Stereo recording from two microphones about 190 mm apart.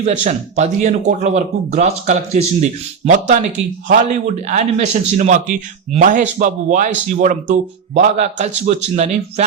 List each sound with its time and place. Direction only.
0.0 s speech: 40° right (ahead or behind)